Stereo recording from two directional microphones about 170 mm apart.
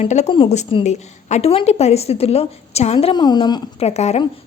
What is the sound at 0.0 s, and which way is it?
A woman's voice, 40° left (ahead or behind).